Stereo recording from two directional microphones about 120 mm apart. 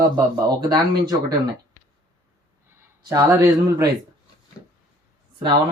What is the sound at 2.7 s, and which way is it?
Speech, 25° right (ahead or behind).